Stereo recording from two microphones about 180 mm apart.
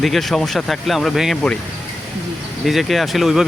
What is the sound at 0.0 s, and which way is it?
Speech, centre (ahead or behind).